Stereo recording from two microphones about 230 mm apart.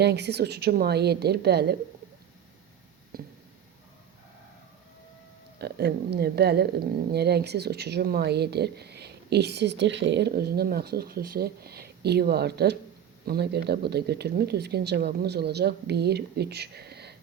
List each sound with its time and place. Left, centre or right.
0.0 s speech: right
3.1 s a sound: right
5.5 s speech: right